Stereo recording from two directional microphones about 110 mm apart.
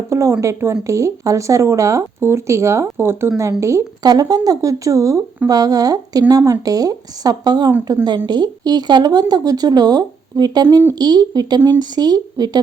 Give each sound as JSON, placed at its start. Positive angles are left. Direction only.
{"t": 0.1, "sound": "speech", "side_deg": -25}
{"t": 4.0, "sound": "speech", "side_deg": -35}